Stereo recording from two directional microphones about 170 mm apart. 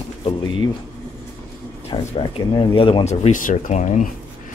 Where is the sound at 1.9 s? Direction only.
30° left (ahead or behind); by 4.0 s 45° left (ahead or behind).